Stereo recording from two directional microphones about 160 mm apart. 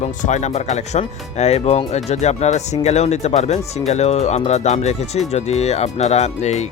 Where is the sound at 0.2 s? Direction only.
50° left (ahead or behind).